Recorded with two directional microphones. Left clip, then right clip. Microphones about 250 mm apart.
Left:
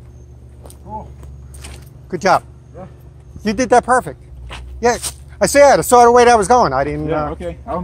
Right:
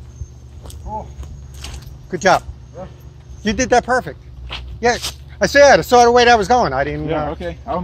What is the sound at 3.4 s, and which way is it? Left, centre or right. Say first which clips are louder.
Speech: left 2 dB; centre.